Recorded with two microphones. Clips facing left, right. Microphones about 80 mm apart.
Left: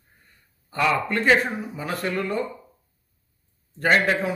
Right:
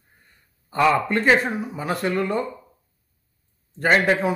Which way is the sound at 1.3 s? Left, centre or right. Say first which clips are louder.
Even; centre.